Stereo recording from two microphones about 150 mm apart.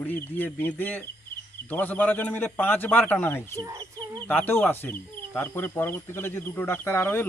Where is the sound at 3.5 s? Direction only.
25° right (ahead or behind).